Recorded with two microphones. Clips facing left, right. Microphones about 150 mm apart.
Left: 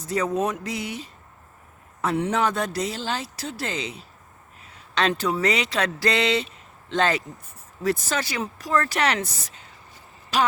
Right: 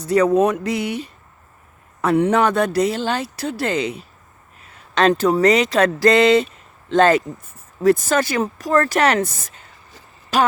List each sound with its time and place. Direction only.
0.0 s speech: 70° right (ahead or behind); by 10.5 s 50° right (ahead or behind)